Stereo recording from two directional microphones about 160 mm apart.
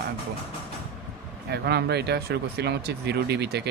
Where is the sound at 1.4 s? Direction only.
90° right.